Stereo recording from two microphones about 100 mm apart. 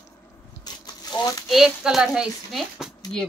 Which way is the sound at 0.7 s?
45° left (ahead or behind).